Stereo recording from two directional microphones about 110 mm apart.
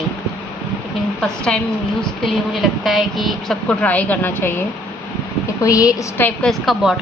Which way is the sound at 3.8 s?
15° left (ahead or behind).